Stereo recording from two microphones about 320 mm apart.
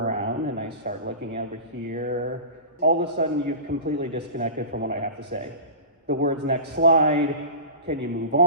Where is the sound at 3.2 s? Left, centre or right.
Right.